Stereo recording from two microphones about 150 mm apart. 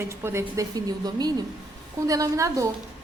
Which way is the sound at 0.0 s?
15° right (ahead or behind).